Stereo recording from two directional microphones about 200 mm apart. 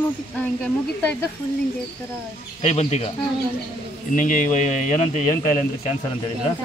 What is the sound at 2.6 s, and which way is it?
Speech, 35° left (ahead or behind).